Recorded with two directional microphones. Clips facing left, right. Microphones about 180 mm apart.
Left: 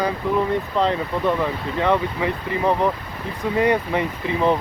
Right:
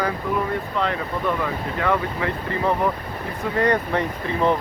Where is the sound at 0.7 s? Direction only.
30° left (ahead or behind).